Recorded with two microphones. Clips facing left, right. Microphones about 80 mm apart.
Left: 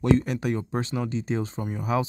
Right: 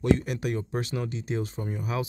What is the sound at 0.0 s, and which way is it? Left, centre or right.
Speech, left.